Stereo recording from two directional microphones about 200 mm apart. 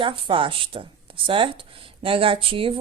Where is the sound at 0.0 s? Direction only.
25° right (ahead or behind).